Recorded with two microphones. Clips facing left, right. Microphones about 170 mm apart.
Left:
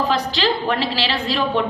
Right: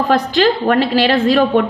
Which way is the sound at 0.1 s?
55° right (ahead or behind).